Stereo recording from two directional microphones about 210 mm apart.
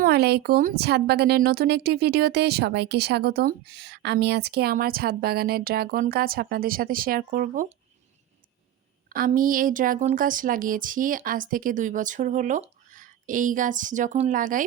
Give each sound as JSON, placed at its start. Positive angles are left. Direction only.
{"t": 0.0, "sound": "speech", "side_deg": -50}
{"t": 9.0, "sound": "a woman's voice", "side_deg": -45}